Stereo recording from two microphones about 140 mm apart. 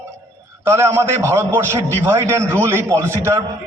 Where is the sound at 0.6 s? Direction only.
20° right (ahead or behind).